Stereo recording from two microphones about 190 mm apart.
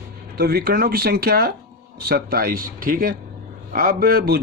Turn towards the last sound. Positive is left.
turn(degrees=-50)  # may be behind; listen again after turning